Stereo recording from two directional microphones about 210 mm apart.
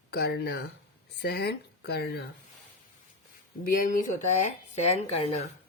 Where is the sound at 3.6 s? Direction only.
40° left (ahead or behind).